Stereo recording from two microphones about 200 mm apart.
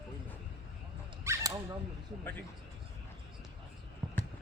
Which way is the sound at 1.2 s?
15° right (ahead or behind).